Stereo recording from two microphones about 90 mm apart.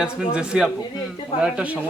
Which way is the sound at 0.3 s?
10° right (ahead or behind).